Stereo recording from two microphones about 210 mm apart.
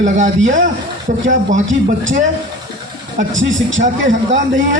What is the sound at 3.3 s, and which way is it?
Speech, 65° right (ahead or behind).